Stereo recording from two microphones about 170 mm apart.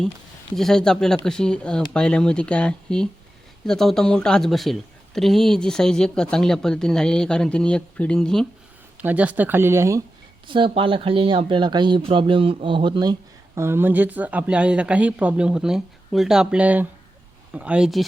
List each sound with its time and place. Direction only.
0.5 s speech: centre (ahead or behind)
9.0 s speech: 10° right (ahead or behind)
10.4 s speech: 30° right (ahead or behind)
13.6 s speech: 15° right (ahead or behind)